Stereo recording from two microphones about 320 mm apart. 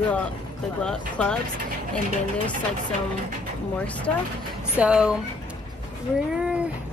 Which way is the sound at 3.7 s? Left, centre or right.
Centre.